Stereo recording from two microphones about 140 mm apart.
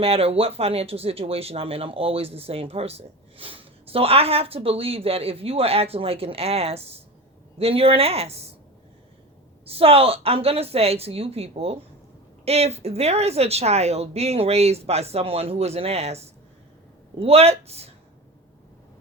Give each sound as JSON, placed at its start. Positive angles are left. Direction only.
{"t": 0.0, "sound": "speech", "side_deg": -45}
{"t": 9.6, "sound": "speech", "side_deg": -45}